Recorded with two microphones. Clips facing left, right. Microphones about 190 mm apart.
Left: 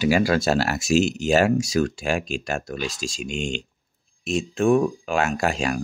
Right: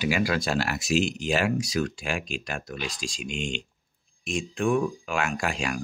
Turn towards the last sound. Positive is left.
turn(degrees=40)  # may be behind; listen again after turning